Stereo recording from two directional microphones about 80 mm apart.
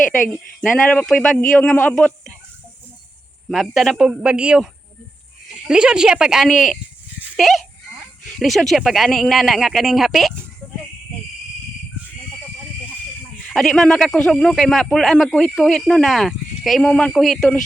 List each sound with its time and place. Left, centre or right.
0.6 s speech: centre
3.5 s speech: centre
5.6 s speech: centre
13.5 s speech: centre